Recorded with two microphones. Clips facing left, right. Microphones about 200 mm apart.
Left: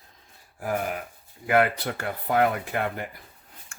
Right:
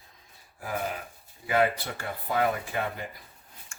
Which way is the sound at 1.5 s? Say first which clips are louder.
Left 3 dB; 60° left (ahead or behind).